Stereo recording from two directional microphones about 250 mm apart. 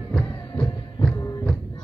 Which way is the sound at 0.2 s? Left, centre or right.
Centre.